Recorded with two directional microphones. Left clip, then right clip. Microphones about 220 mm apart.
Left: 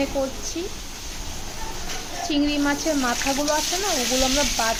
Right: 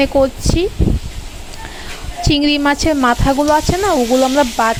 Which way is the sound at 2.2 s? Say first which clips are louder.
Right 9 dB; 40° right (ahead or behind).